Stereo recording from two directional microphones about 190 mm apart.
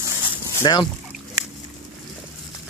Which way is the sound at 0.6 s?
20° left (ahead or behind).